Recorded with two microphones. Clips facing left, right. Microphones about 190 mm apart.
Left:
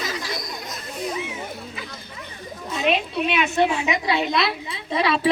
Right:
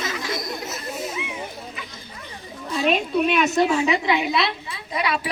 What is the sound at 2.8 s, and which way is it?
A woman's voice, 45° right (ahead or behind).